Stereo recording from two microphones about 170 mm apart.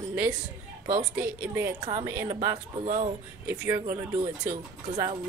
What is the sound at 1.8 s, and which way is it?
Speech, 30° right (ahead or behind).